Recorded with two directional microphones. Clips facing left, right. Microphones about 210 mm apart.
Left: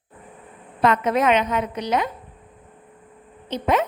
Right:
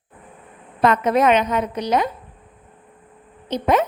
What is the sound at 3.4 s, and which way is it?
Speech, 40° right (ahead or behind).